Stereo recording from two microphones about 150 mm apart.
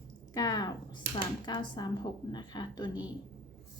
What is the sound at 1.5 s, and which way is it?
A woman's voice, 30° left (ahead or behind).